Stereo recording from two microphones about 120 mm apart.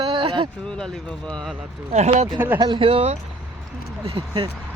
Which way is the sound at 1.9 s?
65° right (ahead or behind).